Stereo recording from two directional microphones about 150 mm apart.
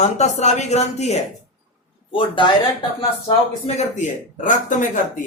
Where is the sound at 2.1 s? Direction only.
35° left (ahead or behind).